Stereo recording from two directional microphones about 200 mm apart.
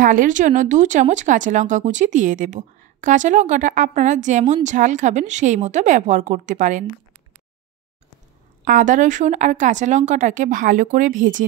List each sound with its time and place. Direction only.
0.0 s speech: 40° right (ahead or behind)
8.6 s speech: 40° right (ahead or behind)